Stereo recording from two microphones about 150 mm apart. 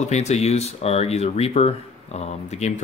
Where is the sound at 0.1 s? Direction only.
50° left (ahead or behind).